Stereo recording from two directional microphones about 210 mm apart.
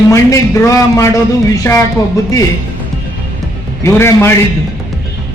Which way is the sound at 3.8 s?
10° left (ahead or behind).